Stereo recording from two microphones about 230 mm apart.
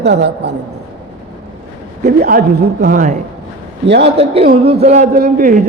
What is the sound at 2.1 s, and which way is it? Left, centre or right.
A woman's voice, right.